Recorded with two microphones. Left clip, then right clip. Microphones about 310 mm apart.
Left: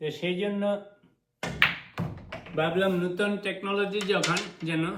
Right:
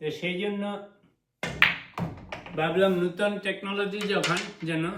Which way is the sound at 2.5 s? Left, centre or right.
Centre.